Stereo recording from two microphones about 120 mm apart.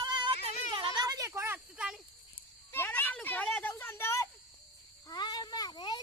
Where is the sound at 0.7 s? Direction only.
40° right (ahead or behind).